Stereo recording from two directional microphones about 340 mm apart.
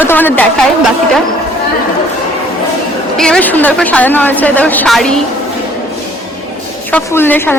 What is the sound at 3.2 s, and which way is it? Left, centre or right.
A woman's voice, centre.